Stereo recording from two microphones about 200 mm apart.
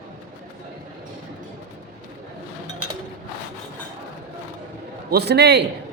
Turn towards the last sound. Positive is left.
turn(degrees=-55)  # may be behind; listen again after turning